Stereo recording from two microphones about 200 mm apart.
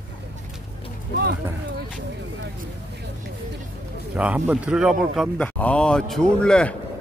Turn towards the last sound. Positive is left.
turn(degrees=5)  # may be behind; listen again after turning